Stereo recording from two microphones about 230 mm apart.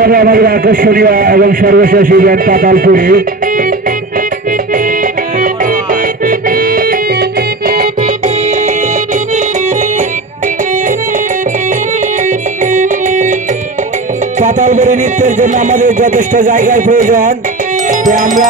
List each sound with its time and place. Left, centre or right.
0.0 s a man's voice: right
6.2 s music: right
12.7 s music: right
14.4 s a man's voice: right